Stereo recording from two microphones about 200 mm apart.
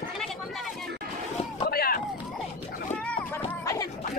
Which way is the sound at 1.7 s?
50° left (ahead or behind).